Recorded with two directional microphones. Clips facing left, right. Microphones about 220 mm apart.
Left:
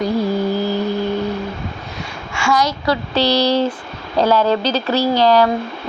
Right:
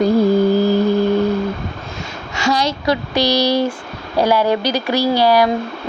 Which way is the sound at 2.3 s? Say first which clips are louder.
Even; 35° right (ahead or behind).